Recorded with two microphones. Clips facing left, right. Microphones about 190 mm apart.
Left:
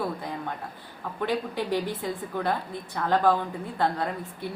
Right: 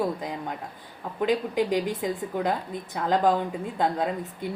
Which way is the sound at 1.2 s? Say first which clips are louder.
Right 4 dB; 15° right (ahead or behind).